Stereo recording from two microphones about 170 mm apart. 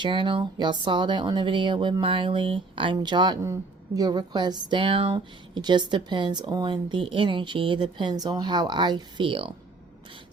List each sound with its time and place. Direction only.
0.0 s speech: 30° right (ahead or behind)